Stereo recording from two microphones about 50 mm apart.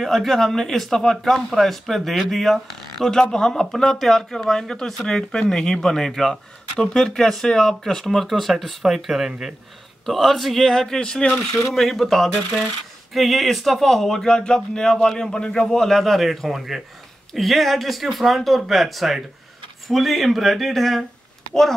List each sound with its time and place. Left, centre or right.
0.0 s speech: centre
11.7 s speech: centre